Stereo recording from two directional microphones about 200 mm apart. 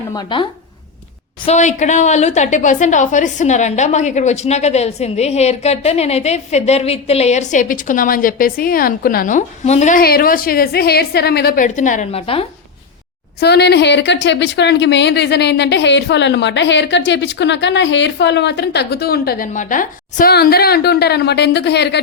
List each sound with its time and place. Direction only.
0.1 s speech: 20° left (ahead or behind)
1.5 s a woman's voice: 35° left (ahead or behind)
12.2 s speech: 30° left (ahead or behind)
13.4 s speech: 55° left (ahead or behind)